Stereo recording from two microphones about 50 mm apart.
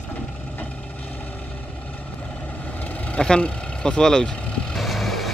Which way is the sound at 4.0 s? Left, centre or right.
Centre.